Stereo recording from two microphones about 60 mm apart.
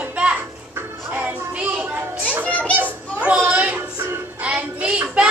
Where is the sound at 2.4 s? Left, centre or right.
Left.